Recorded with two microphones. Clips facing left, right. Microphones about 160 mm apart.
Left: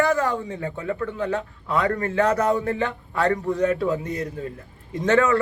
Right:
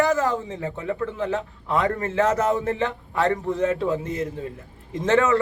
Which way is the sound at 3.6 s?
25° right (ahead or behind).